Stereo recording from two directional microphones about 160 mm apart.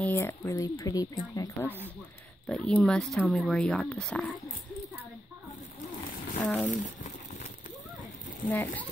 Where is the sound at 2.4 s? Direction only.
5° left (ahead or behind).